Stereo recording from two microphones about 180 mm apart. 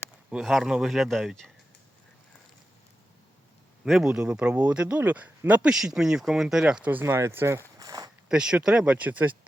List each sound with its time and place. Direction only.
0.3 s speech: 5° right (ahead or behind)
3.8 s speech: 5° right (ahead or behind)
7.8 s a sound: 20° right (ahead or behind)
8.3 s speech: 5° right (ahead or behind)